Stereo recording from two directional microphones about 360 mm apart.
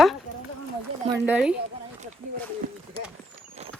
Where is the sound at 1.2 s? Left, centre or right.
Centre.